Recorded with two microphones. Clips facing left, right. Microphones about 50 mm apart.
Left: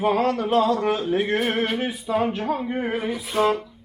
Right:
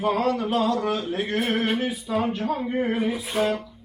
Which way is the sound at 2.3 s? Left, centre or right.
Left.